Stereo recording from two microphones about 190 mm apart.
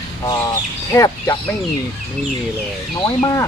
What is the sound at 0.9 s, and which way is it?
Speech, 20° left (ahead or behind).